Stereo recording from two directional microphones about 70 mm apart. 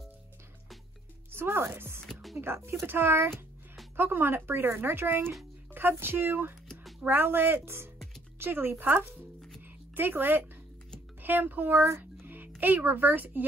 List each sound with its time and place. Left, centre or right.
1.3 s speech: right
6.7 s a sound: centre
7.0 s speech: right
11.7 s speech: right
12.0 s speech: right